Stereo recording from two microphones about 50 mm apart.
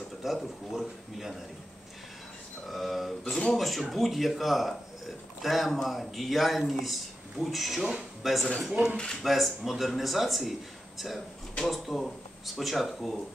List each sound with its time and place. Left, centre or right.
0.2 s speech: centre
2.7 s speech: centre
8.9 s speech: centre
9.2 s speech: centre